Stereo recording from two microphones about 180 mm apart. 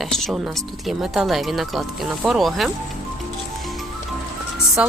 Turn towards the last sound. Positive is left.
turn(degrees=-5)  # may be behind; listen again after turning